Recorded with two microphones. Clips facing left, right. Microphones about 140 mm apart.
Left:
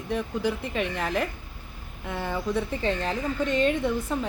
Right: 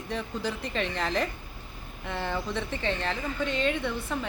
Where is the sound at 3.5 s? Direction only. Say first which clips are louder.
Left 5 dB; 45° left (ahead or behind).